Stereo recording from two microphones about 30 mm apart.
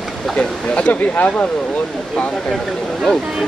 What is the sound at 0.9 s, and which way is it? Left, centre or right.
Speech, left.